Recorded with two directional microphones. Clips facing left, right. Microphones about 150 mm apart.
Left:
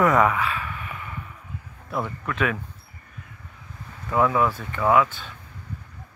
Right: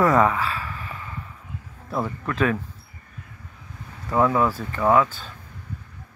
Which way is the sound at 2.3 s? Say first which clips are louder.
Right 3 dB; 35° right (ahead or behind).